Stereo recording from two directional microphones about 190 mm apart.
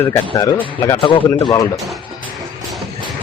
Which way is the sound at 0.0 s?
15° left (ahead or behind).